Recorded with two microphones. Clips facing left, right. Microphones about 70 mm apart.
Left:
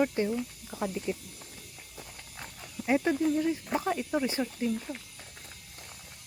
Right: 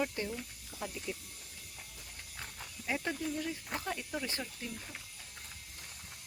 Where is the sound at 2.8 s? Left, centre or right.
Left.